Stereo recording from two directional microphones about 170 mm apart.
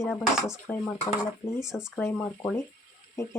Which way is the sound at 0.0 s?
Centre (ahead or behind).